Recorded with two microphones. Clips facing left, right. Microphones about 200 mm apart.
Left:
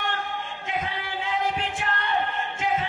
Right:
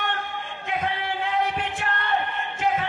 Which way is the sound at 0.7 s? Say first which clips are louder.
Right 4 dB; 60° right (ahead or behind).